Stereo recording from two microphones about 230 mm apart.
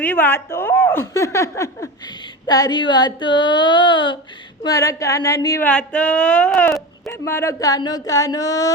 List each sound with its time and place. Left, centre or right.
0.0 s a woman's voice: centre